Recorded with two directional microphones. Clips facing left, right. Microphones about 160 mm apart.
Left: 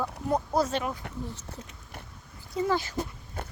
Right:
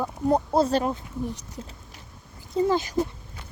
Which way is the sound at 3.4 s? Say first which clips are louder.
Left 9 dB; 55° left (ahead or behind).